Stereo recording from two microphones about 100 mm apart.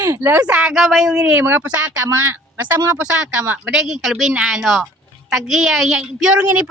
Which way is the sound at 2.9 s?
10° right (ahead or behind).